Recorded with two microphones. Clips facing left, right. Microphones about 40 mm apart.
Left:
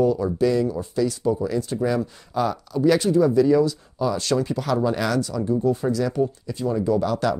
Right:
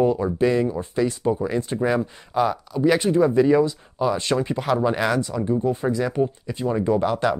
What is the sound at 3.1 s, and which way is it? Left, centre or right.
Speech, right.